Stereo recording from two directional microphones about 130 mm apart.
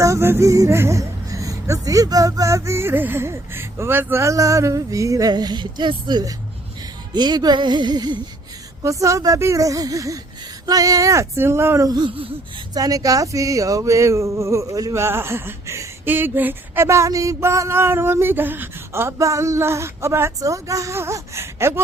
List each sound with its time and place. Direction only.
0.0 s speech: 20° right (ahead or behind)
7.1 s music: 35° right (ahead or behind)
8.8 s speech: 25° right (ahead or behind)
11.9 s music: 35° right (ahead or behind)
12.7 s speech: 25° right (ahead or behind)